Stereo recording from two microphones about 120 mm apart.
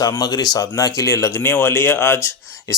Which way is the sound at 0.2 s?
35° left (ahead or behind).